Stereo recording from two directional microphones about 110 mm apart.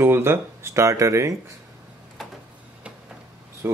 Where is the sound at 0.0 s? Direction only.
20° right (ahead or behind).